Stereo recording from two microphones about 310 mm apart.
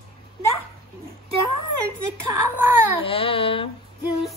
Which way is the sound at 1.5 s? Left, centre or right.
Right.